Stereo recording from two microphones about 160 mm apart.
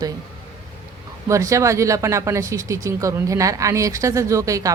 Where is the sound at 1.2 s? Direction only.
20° right (ahead or behind).